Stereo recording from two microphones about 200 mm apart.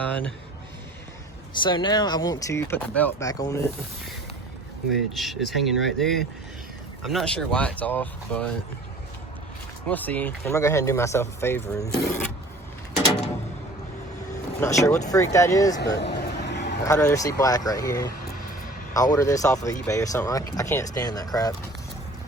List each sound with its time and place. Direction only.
0.0 s speech: 5° left (ahead or behind)
1.6 s speech: 25° left (ahead or behind)
5.1 s speech: centre (ahead or behind)
9.9 s speech: 10° left (ahead or behind)
14.6 s speech: 15° left (ahead or behind)
16.0 s vehicle: 60° left (ahead or behind)
16.8 s speech: 15° left (ahead or behind)